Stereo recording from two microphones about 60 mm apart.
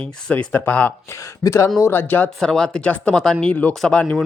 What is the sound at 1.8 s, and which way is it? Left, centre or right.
Speech, left.